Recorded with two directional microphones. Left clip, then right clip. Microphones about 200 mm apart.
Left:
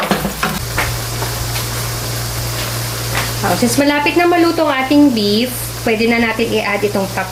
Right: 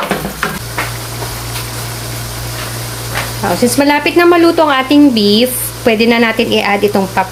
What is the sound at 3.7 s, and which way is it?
Speech, 40° right (ahead or behind).